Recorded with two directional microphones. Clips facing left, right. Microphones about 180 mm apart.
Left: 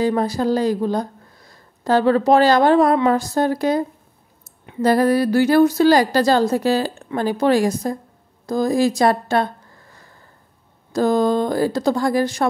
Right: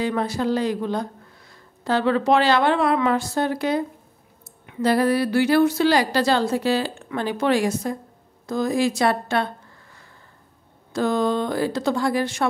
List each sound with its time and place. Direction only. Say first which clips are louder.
0.0 s speech: left 4 dB; 40° left (ahead or behind)
4.8 s speech: left 4 dB; 45° left (ahead or behind)
10.9 s speech: left 4 dB; 40° left (ahead or behind)